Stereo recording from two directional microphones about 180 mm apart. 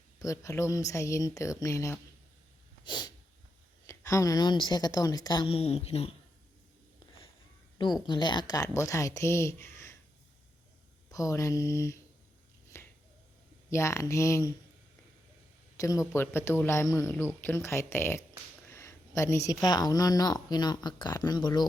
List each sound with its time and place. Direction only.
0.2 s a man's voice: 15° left (ahead or behind); by 6.1 s 35° left (ahead or behind)
8.0 s a man's voice: 25° left (ahead or behind)
11.1 s a man's voice: 15° left (ahead or behind)
12.7 s finger snapping: 15° left (ahead or behind)
13.7 s a man's voice: 15° left (ahead or behind)
15.8 s a man's voice: 15° left (ahead or behind)